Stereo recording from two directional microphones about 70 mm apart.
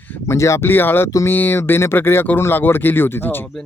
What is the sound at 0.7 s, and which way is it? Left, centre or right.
Speech, left.